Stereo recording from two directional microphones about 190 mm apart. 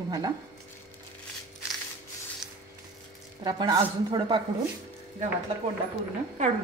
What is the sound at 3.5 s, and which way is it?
Speech, 20° right (ahead or behind).